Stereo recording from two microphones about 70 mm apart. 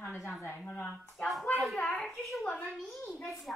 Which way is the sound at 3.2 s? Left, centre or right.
Centre.